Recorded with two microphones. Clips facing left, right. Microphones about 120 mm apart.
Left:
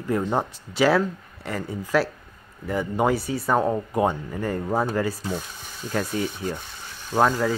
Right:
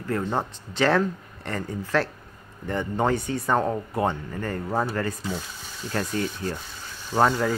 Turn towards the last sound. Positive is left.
turn(degrees=0)  # may be behind; listen again after turning